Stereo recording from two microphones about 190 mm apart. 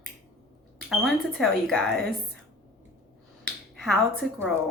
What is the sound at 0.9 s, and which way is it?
Speech, centre (ahead or behind).